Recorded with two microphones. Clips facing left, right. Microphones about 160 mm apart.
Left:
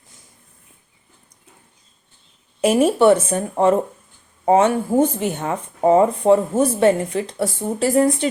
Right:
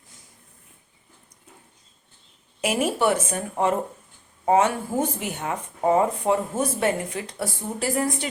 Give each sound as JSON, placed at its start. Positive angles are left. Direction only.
{"t": 2.6, "sound": "speech", "side_deg": 30}